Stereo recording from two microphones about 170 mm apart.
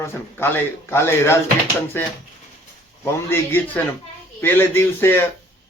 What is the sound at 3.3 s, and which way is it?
Speech, 10° left (ahead or behind).